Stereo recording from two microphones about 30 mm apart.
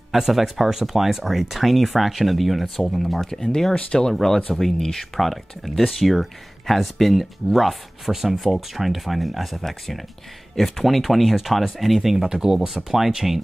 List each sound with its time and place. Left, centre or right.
0.1 s speech: centre
3.3 s speech: left
5.1 s speech: centre
12.3 s speech: centre